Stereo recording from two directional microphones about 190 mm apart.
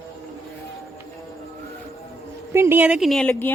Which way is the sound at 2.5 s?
15° right (ahead or behind).